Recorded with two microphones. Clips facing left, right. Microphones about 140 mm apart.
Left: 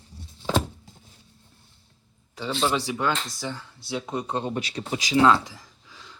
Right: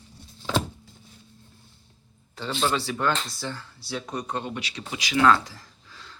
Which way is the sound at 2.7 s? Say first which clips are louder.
Even; 15° left (ahead or behind).